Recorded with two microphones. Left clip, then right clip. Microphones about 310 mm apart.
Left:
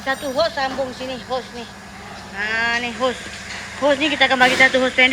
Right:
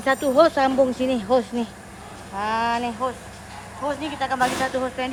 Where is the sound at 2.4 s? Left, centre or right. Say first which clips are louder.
Left 3 dB; centre.